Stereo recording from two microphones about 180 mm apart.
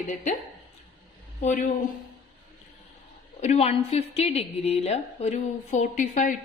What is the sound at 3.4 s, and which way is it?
A woman's voice, 35° left (ahead or behind).